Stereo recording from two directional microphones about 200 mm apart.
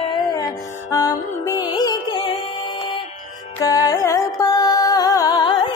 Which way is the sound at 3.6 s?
15° left (ahead or behind).